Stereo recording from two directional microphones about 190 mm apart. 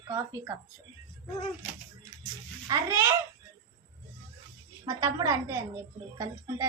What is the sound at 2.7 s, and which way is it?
Speech, 15° right (ahead or behind).